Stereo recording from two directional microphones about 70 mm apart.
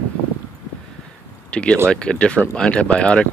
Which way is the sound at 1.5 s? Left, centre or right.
Centre.